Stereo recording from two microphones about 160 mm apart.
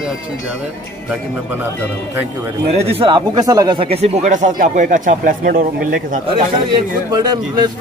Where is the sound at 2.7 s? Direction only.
40° right (ahead or behind); by 6.2 s 60° right (ahead or behind).